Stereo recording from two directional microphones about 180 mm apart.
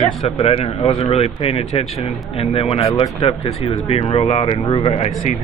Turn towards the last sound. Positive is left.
turn(degrees=35)  # may be behind; listen again after turning